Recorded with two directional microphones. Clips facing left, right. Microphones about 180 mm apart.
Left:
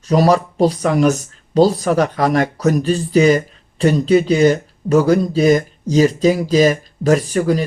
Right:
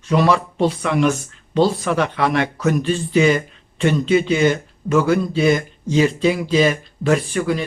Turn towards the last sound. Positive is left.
turn(degrees=40)  # may be behind; listen again after turning